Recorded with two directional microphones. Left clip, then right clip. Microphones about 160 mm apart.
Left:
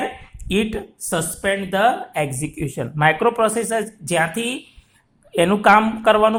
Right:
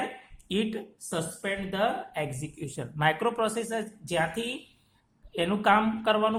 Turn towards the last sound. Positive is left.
turn(degrees=30)  # may be behind; listen again after turning